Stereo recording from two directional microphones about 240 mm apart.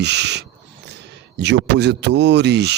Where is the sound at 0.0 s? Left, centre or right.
Right.